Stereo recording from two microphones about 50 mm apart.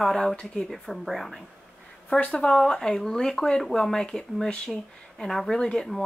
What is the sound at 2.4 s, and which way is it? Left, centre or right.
Speech, centre.